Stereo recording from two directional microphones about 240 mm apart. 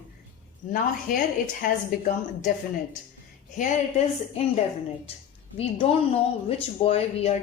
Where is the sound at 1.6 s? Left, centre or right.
Left.